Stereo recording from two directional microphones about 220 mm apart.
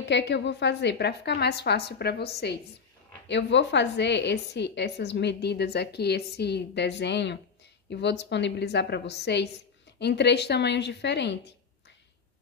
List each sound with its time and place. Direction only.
0.0 s a woman's voice: 50° left (ahead or behind)